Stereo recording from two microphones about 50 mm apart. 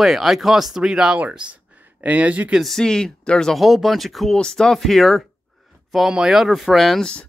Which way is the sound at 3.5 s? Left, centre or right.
Centre.